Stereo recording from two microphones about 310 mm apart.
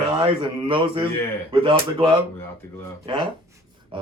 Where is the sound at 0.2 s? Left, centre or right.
Centre.